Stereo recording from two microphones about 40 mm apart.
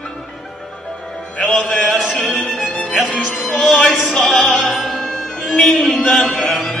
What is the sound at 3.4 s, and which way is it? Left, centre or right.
Music, centre.